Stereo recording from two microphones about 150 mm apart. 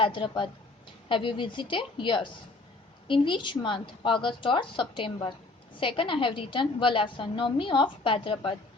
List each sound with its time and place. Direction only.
0.0 s a woman's voice: 30° left (ahead or behind)